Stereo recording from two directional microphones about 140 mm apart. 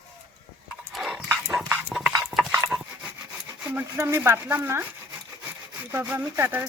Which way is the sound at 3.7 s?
15° right (ahead or behind).